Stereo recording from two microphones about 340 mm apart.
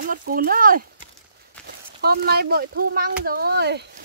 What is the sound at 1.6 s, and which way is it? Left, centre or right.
Speech, right.